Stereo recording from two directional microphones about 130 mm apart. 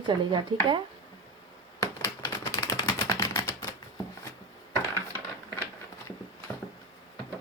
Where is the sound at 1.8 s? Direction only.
25° left (ahead or behind).